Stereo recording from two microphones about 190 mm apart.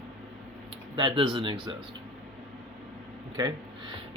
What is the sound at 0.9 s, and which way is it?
Speech, 25° right (ahead or behind).